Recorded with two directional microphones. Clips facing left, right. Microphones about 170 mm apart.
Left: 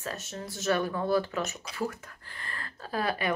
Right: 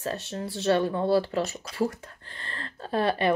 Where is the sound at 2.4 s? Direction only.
30° right (ahead or behind).